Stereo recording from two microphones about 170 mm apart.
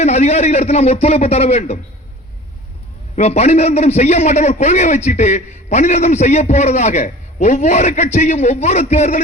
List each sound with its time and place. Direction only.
0.0 s a man's voice: 40° left (ahead or behind)
3.2 s a man's voice: 40° left (ahead or behind)